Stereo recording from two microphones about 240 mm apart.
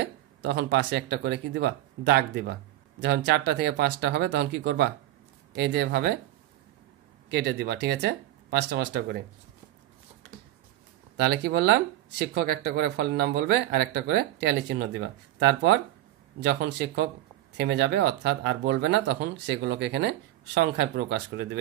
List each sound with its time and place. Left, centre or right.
0.0 s speech: right
7.2 s speech: right
11.1 s speech: right